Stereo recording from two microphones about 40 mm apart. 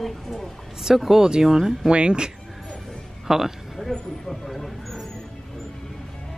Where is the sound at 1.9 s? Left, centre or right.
Right.